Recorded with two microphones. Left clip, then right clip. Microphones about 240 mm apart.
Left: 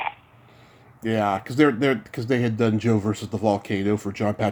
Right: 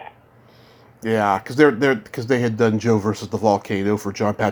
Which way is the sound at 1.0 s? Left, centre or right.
Centre.